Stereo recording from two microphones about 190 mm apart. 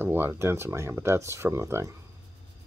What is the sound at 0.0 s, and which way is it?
Speech, 10° right (ahead or behind).